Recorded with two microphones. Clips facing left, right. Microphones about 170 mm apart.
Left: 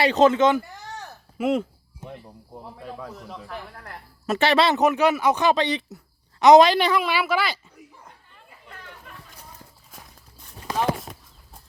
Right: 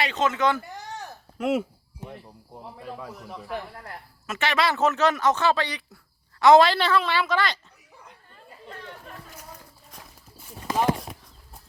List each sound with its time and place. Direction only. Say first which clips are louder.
0.0 s speech: left 7 dB; 35° left (ahead or behind)
1.4 s speech: left 2 dB; centre (ahead or behind)
2.8 s speech: left 1 dB; centre (ahead or behind)
4.3 s speech: left 5 dB; 35° left (ahead or behind)
4.8 s speech: left 2 dB; 10° left (ahead or behind)
9.9 s a sound: right 1 dB; 5° right (ahead or behind)